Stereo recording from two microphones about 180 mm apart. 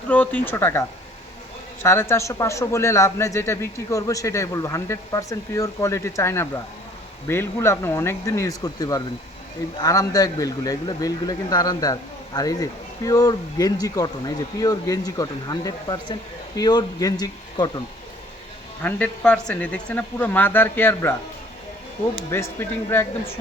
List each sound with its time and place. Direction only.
0.1 s a man's voice: 10° left (ahead or behind)
18.8 s a man's voice: 10° left (ahead or behind)
22.3 s a man's voice: 15° left (ahead or behind)